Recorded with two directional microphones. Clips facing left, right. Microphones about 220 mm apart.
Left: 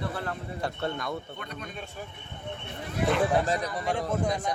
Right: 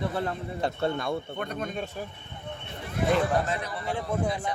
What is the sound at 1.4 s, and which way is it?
Speech, 45° right (ahead or behind).